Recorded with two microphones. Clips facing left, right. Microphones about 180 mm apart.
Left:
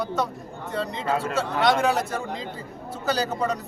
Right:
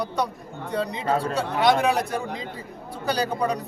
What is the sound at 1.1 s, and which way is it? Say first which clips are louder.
Speech: right 2 dB; 35° right (ahead or behind).